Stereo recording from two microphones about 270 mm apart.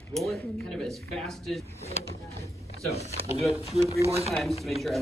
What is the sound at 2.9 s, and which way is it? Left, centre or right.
Speech, right.